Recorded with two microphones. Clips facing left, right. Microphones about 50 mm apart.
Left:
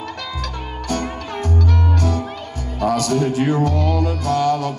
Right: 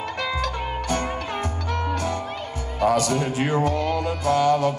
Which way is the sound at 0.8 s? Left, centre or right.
Centre.